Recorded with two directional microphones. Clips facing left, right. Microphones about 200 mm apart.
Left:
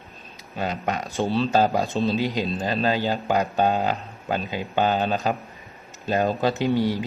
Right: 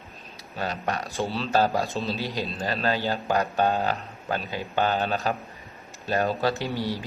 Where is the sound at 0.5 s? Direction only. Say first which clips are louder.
Left 2 dB; 20° left (ahead or behind).